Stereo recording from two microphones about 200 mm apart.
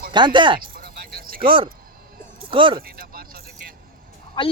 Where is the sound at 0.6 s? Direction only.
50° right (ahead or behind).